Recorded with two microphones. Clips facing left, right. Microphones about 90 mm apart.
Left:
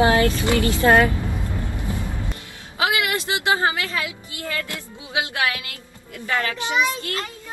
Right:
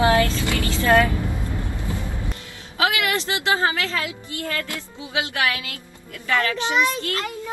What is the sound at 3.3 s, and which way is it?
Speech, 20° left (ahead or behind).